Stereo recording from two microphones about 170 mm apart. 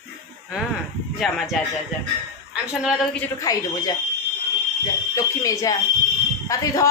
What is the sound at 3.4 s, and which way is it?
Speech, 20° left (ahead or behind).